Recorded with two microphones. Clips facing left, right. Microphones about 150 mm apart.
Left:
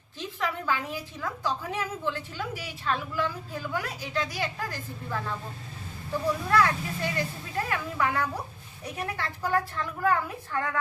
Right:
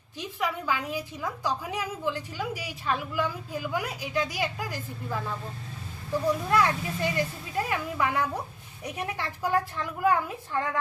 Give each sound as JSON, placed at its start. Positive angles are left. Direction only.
{"t": 0.2, "sound": "a woman's voice", "side_deg": -10}
{"t": 6.5, "sound": "a woman's voice", "side_deg": -15}